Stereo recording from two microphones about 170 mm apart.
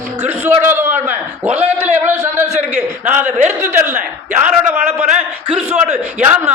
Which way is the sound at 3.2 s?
45° right (ahead or behind).